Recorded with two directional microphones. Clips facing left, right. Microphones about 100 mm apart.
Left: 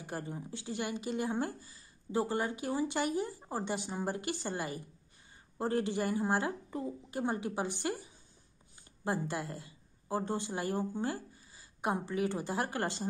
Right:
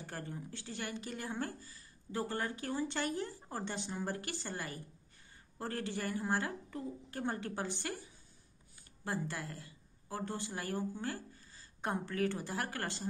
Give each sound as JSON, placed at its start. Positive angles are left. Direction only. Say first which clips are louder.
{"t": 0.0, "sound": "a woman's voice", "louder": "left 4 dB", "side_deg": 15}